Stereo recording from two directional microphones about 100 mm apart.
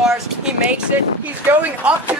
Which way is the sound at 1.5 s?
15° right (ahead or behind).